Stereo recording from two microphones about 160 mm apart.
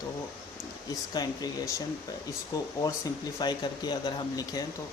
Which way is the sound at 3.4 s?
25° left (ahead or behind).